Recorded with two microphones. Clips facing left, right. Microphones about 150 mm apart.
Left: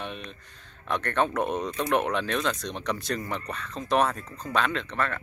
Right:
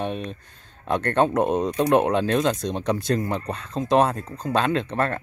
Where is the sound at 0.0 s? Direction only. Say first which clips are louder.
Right 9 dB; 45° right (ahead or behind).